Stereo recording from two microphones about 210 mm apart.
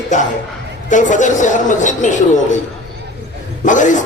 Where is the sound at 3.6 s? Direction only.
35° left (ahead or behind).